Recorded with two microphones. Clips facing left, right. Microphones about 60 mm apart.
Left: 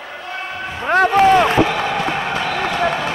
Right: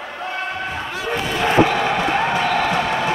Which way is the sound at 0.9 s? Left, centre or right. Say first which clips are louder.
Left 15 dB; left.